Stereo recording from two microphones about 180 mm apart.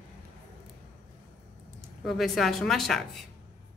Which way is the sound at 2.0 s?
Centre (ahead or behind).